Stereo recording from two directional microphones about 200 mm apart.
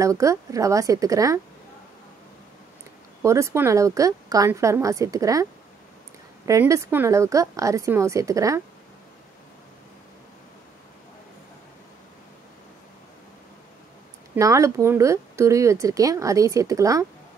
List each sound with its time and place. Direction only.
0.0 s speech: 15° right (ahead or behind)
3.2 s speech: 15° right (ahead or behind)
14.3 s speech: 15° right (ahead or behind)